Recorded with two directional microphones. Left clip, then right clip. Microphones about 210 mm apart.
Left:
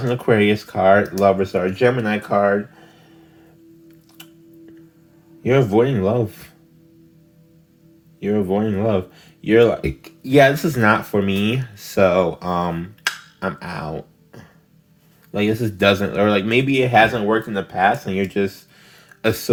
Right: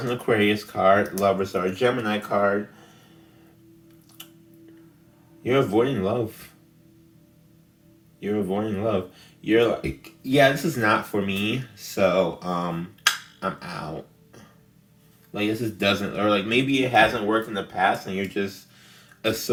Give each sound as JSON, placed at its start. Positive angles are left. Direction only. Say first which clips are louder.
{"t": 0.1, "sound": "speech", "louder": "left 5 dB", "side_deg": 40}
{"t": 5.4, "sound": "speech", "louder": "left 5 dB", "side_deg": 40}
{"t": 8.2, "sound": "speech", "louder": "left 6 dB", "side_deg": 40}
{"t": 18.9, "sound": "a sound", "louder": "left 5 dB", "side_deg": 50}